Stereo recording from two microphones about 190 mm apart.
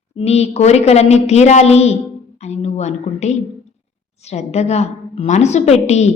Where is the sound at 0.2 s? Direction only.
35° left (ahead or behind).